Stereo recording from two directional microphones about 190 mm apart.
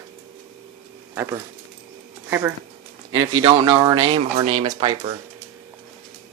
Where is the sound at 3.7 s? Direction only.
15° right (ahead or behind).